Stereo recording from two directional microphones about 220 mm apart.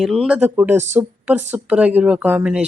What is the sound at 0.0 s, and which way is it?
Speech, centre (ahead or behind).